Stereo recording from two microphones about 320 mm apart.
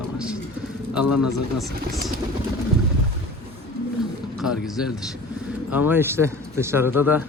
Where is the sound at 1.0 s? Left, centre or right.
Left.